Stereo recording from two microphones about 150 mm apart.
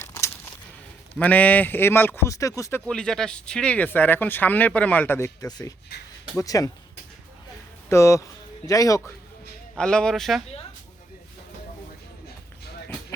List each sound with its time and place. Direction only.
0.0 s a sound: 20° left (ahead or behind)
1.2 s speech: 10° left (ahead or behind)
2.8 s speech: 5° left (ahead or behind); by 6.7 s 20° left (ahead or behind)
7.9 s speech: 20° left (ahead or behind)
9.7 s speech: 5° left (ahead or behind)